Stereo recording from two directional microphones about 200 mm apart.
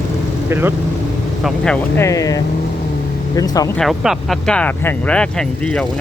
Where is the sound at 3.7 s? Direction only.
Centre (ahead or behind).